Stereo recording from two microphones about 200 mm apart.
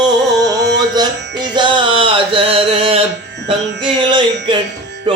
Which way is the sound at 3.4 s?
25° right (ahead or behind).